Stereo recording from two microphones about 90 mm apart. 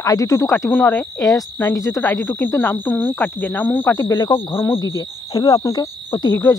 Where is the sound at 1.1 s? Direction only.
40° left (ahead or behind).